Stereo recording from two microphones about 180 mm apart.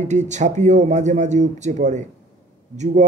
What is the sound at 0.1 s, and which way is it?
A man's voice, 40° right (ahead or behind).